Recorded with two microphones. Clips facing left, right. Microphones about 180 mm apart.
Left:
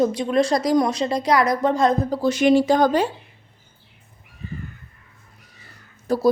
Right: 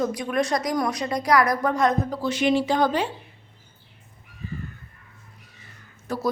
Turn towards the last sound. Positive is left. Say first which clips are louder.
# left 8 dB
turn(degrees=35)  # may be behind; listen again after turning